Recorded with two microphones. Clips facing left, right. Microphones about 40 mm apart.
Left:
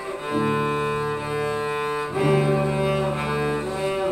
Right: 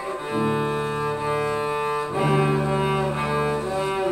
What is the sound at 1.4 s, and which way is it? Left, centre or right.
Cello, centre.